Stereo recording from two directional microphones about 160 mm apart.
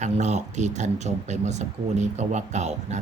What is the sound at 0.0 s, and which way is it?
Speech, 45° right (ahead or behind).